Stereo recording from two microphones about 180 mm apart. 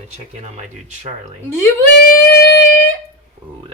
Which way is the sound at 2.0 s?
65° left (ahead or behind).